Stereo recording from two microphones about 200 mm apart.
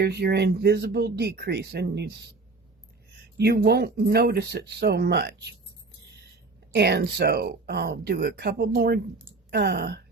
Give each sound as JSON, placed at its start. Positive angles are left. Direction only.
{"t": 0.0, "sound": "speech", "side_deg": -55}
{"t": 3.3, "sound": "speech", "side_deg": -55}
{"t": 6.7, "sound": "speech", "side_deg": -55}